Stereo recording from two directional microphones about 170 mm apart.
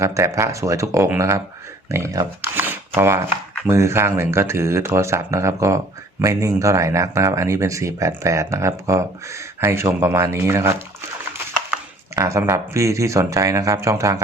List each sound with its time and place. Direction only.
0.0 s speech: 15° right (ahead or behind)
12.1 s speech: 15° right (ahead or behind)